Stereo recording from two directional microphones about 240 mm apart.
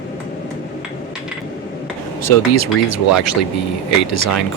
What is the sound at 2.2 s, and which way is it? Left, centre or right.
Speech, left.